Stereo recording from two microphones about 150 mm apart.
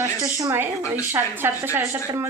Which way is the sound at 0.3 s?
20° right (ahead or behind).